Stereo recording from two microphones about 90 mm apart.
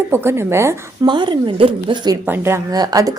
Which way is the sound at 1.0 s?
60° right (ahead or behind).